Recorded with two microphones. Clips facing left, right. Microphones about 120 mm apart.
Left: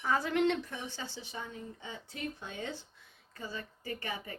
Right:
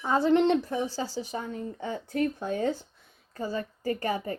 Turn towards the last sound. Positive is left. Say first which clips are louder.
# right 11 dB
turn(degrees=-40)  # may be behind; listen again after turning